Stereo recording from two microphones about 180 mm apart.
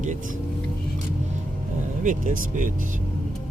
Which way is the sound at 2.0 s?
45° right (ahead or behind).